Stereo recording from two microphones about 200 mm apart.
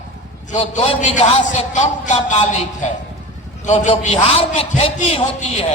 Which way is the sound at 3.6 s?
40° left (ahead or behind).